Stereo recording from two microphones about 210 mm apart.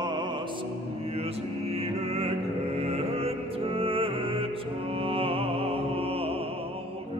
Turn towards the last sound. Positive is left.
turn(degrees=-25)  # may be behind; listen again after turning